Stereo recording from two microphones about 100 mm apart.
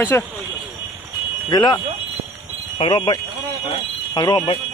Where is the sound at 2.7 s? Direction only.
90° left.